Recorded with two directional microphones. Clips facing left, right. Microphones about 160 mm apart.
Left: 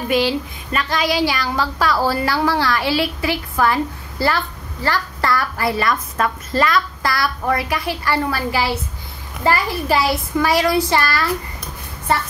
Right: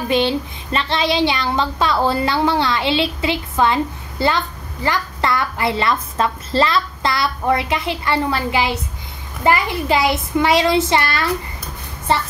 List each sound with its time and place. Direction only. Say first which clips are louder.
0.1 s speech: even; 25° right (ahead or behind)